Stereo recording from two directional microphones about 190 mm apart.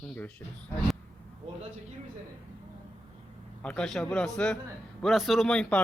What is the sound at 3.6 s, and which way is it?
A man's voice, 5° left (ahead or behind).